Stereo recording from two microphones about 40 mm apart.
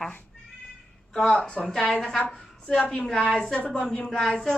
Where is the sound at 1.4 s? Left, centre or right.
Left.